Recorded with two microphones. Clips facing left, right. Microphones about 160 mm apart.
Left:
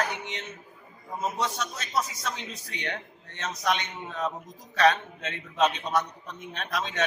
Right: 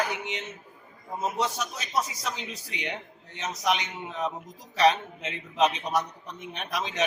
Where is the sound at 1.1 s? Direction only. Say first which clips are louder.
Right 1 dB; 20° right (ahead or behind).